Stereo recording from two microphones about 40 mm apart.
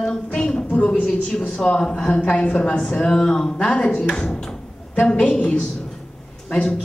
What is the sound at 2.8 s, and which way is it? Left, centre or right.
Speech, left.